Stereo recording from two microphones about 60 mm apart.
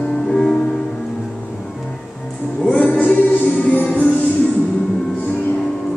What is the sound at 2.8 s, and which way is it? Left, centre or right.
Music, left.